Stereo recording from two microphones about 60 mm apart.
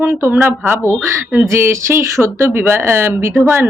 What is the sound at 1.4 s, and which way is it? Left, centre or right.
A woman's voice, right.